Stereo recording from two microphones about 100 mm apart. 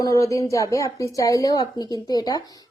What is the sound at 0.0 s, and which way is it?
Speech, 35° left (ahead or behind).